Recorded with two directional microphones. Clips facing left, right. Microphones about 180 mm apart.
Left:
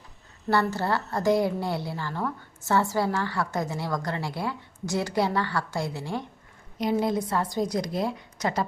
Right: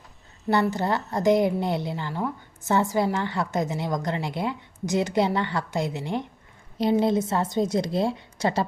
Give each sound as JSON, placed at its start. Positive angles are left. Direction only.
{"t": 0.5, "sound": "a woman's voice", "side_deg": -15}